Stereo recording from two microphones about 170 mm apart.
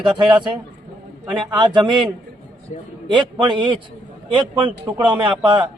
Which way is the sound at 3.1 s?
30° right (ahead or behind).